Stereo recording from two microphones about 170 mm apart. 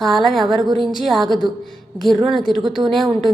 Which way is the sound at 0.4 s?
25° right (ahead or behind).